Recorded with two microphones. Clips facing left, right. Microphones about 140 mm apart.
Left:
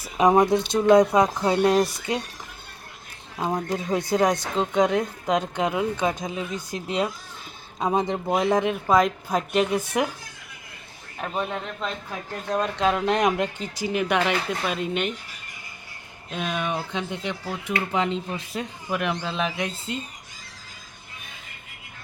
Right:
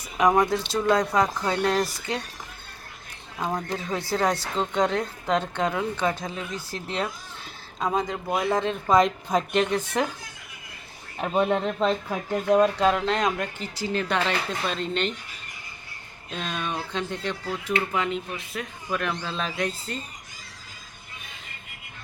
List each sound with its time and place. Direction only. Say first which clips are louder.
0.0 s speech: left 3 dB; 25° left (ahead or behind)
3.3 s speech: left 3 dB; 15° left (ahead or behind)
7.8 s speech: left 3 dB; 20° left (ahead or behind)
8.9 s a woman's voice: right 1 dB; centre (ahead or behind)
11.2 s a man's voice: right 6 dB; 25° right (ahead or behind)
12.3 s speech: right 7 dB; 10° right (ahead or behind)
12.8 s a woman's voice: right 1 dB; centre (ahead or behind)
13.1 s speech: left 3 dB; 20° left (ahead or behind)
16.3 s speech: left 3 dB; 10° left (ahead or behind)
17.9 s speech: left 2 dB; 30° left (ahead or behind)
18.9 s speech: left 2 dB; 15° left (ahead or behind)